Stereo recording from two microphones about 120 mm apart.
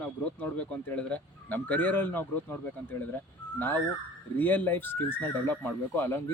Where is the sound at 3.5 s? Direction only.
15° left (ahead or behind).